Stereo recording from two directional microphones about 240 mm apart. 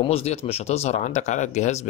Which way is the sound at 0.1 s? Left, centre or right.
Left.